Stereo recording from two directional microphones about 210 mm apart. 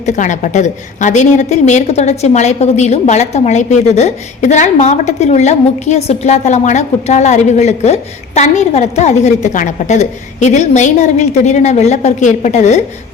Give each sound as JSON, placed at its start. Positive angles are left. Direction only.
{"t": 0.0, "sound": "a woman's voice", "side_deg": 35}